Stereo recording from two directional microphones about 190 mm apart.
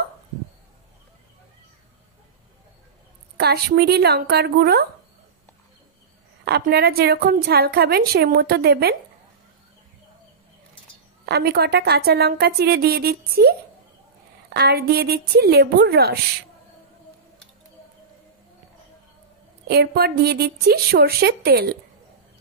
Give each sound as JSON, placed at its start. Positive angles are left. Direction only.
{"t": 3.3, "sound": "a woman's voice", "side_deg": -55}
{"t": 6.4, "sound": "a woman's voice", "side_deg": -55}
{"t": 11.2, "sound": "a woman's voice", "side_deg": -55}
{"t": 19.7, "sound": "a woman's voice", "side_deg": -60}